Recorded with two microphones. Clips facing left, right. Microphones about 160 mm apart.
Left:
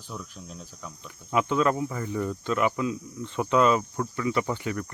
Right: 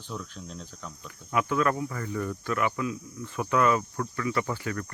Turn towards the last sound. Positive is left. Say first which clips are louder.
# left 2 dB
turn(degrees=20)  # may be behind; listen again after turning